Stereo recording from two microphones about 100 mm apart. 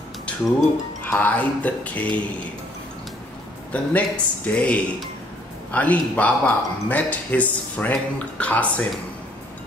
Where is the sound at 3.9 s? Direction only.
15° left (ahead or behind).